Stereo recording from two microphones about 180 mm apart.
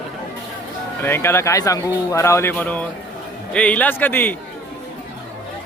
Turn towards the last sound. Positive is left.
turn(degrees=10)  # may be behind; listen again after turning